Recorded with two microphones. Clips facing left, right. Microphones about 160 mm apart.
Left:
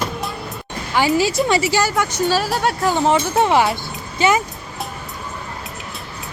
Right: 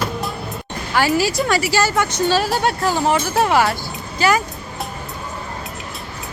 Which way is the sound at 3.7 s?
20° left (ahead or behind).